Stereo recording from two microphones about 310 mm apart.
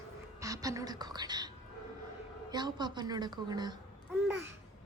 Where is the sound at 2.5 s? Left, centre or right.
Centre.